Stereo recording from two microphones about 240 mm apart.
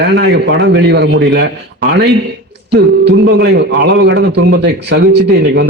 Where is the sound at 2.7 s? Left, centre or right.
Right.